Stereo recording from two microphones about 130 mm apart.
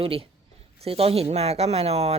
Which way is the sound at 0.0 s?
45° right (ahead or behind).